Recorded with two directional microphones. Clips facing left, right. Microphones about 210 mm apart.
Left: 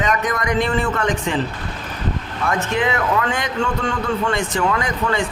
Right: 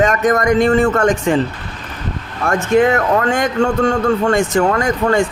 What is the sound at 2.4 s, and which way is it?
Speech, 45° right (ahead or behind).